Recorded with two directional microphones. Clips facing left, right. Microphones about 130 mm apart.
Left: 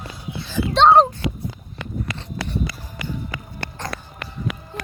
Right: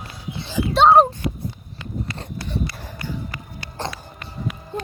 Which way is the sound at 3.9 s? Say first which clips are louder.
Left 2 dB; 75° left (ahead or behind).